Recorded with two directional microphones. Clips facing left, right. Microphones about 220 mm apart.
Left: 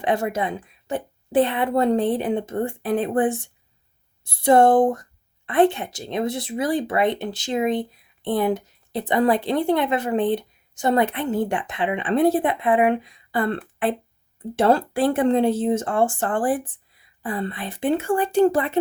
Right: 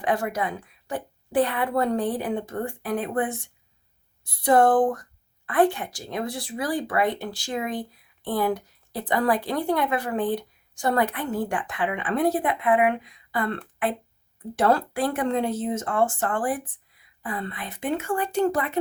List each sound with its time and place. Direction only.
0.0 s speech: 25° left (ahead or behind)